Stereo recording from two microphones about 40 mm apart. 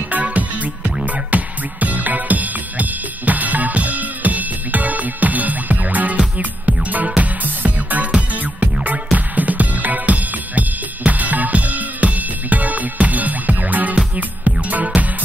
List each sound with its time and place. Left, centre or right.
0.2 s music: right